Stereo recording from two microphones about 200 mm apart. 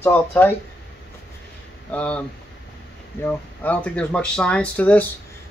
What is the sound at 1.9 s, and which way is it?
Speech, 5° left (ahead or behind).